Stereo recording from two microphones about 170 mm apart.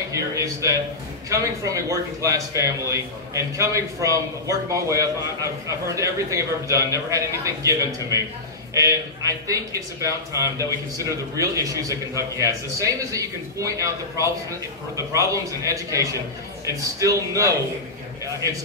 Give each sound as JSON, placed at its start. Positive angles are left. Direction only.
{"t": 0.1, "sound": "a man's voice", "side_deg": -20}